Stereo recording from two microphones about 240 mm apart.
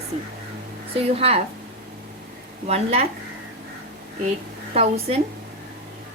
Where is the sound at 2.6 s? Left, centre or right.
Right.